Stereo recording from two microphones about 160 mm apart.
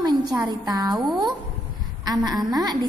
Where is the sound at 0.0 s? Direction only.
25° right (ahead or behind).